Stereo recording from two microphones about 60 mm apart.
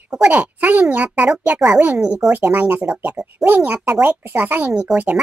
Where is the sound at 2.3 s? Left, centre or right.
Right.